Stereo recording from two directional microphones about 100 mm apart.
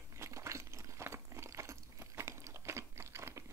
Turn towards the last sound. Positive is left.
turn(degrees=-25)  # may be behind; listen again after turning